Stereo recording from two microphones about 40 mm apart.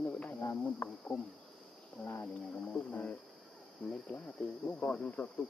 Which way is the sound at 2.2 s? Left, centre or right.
Left.